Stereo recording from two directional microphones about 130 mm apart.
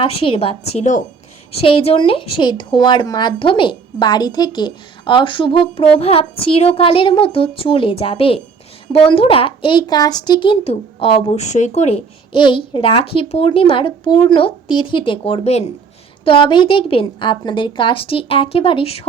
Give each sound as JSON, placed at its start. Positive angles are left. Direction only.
{"t": 0.0, "sound": "a woman's voice", "side_deg": 45}
{"t": 10.6, "sound": "a woman's voice", "side_deg": 55}
{"t": 12.3, "sound": "speech", "side_deg": 40}
{"t": 16.2, "sound": "speech", "side_deg": 40}